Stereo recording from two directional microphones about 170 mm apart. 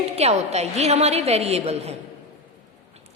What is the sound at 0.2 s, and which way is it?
A woman's voice, 40° right (ahead or behind).